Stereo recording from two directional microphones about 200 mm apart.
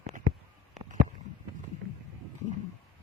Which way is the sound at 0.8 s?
40° right (ahead or behind).